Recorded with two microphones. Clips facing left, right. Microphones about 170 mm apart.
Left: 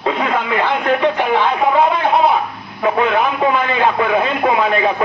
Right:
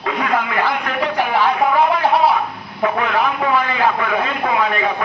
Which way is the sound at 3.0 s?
25° left (ahead or behind).